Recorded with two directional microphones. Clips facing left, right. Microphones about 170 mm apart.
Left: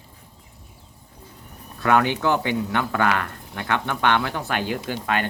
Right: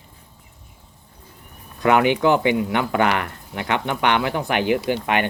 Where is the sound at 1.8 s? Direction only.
15° right (ahead or behind).